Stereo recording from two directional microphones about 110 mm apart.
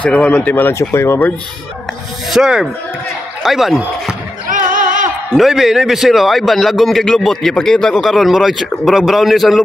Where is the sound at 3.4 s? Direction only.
Centre (ahead or behind).